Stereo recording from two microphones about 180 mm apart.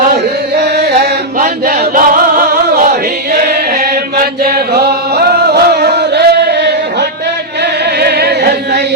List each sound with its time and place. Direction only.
0.1 s chant: 65° right (ahead or behind)
1.4 s choir: 50° right (ahead or behind)
3.8 s chant: 60° right (ahead or behind)
7.9 s chant: 65° right (ahead or behind)